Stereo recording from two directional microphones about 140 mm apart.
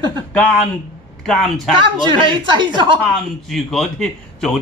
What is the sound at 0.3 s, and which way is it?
A man's voice, 10° left (ahead or behind).